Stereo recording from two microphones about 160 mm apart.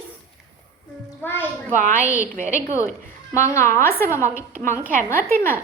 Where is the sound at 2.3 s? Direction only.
50° right (ahead or behind).